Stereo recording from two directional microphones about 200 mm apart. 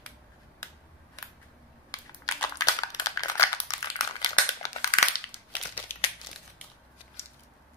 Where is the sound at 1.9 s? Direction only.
20° left (ahead or behind).